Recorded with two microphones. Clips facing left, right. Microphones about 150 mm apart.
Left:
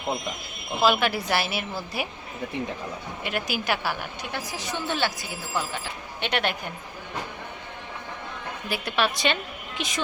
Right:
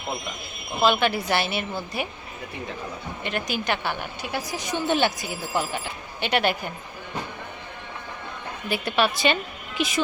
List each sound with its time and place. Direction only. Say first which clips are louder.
0.8 s a woman's voice: right 1 dB; centre (ahead or behind)
3.2 s a woman's voice: right 1 dB; 5° left (ahead or behind)
4.3 s speech: right 4 dB; 15° right (ahead or behind)
5.8 s a woman's voice: right 1 dB; 5° right (ahead or behind)
8.7 s a woman's voice: right 3 dB; centre (ahead or behind)